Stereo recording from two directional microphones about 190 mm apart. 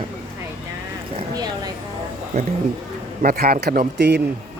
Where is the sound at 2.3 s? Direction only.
35° right (ahead or behind).